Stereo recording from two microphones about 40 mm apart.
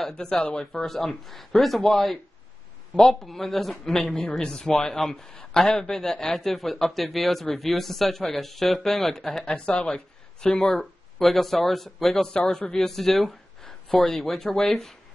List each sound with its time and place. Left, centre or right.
0.1 s speech: left
0.8 s a man's voice: centre
9.4 s a man's voice: left; by 15.0 s centre